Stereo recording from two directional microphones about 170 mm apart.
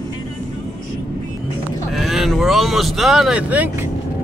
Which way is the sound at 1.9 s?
Centre (ahead or behind).